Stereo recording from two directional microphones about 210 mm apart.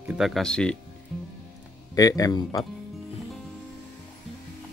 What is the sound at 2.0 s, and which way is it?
Speech, 15° left (ahead or behind).